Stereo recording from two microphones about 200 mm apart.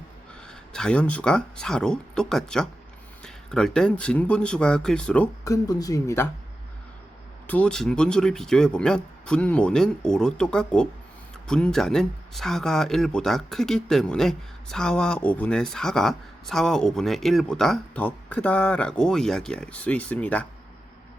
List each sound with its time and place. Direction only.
0.4 s speech: 5° left (ahead or behind)
7.4 s speech: 5° left (ahead or behind)